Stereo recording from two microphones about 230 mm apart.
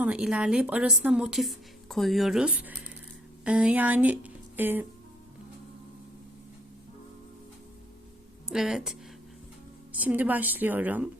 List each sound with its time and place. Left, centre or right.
0.0 s a woman's voice: centre
8.4 s a woman's voice: centre